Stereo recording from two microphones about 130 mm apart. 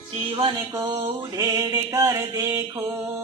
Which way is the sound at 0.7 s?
25° right (ahead or behind).